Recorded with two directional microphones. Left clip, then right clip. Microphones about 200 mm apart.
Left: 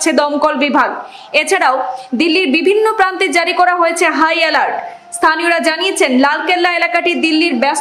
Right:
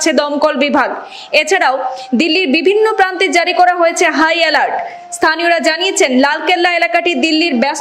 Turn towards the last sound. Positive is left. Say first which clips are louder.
# even
turn(degrees=-15)  # may be behind; listen again after turning